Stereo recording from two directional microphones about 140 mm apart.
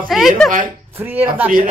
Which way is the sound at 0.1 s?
Centre (ahead or behind).